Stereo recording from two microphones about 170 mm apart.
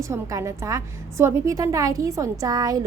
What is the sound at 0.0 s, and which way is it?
Speech, 20° right (ahead or behind).